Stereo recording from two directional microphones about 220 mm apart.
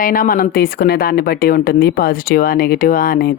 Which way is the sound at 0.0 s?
40° left (ahead or behind).